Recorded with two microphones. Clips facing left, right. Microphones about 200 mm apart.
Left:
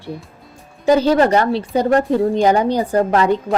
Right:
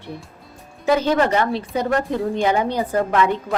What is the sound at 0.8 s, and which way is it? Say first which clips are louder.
A woman's voice: left 5 dB; 35° left (ahead or behind).